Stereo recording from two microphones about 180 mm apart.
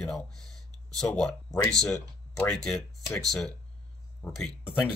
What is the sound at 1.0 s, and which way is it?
Speech, 5° left (ahead or behind).